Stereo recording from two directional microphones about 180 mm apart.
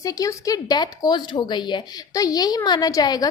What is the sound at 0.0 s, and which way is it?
Speech, 20° left (ahead or behind).